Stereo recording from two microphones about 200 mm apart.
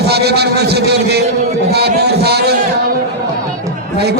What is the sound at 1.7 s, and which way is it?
Speech, 55° right (ahead or behind).